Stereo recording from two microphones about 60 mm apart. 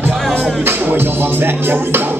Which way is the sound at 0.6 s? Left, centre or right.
Right.